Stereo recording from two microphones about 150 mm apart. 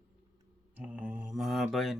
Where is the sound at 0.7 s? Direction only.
10° right (ahead or behind).